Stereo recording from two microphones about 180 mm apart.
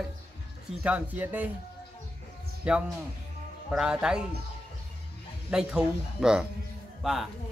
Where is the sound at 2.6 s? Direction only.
5° right (ahead or behind).